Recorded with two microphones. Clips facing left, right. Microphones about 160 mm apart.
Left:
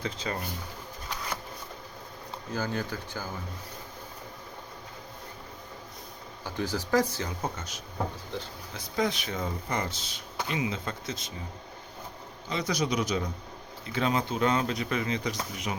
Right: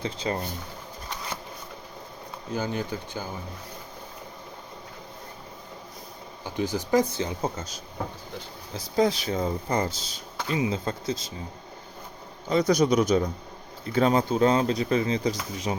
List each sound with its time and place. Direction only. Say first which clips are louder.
0.0 s speech: right 4 dB; 30° right (ahead or behind)
2.5 s speech: right 3 dB; 20° right (ahead or behind)
6.4 s speech: right 3 dB; 20° right (ahead or behind)
7.5 s speech: right 2 dB; 35° right (ahead or behind)
12.5 s a man's voice: right 8 dB; 45° right (ahead or behind); by 15.8 s 30° right (ahead or behind)